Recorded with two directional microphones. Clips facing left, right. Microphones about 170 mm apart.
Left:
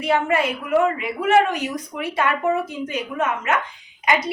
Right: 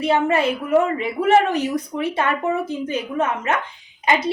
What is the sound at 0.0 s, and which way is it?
Speech, 25° right (ahead or behind).